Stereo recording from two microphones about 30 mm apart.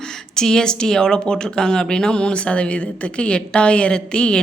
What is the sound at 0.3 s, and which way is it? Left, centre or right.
A woman's voice, centre.